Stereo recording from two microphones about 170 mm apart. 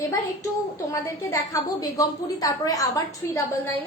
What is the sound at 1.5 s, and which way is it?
Speech, 20° left (ahead or behind).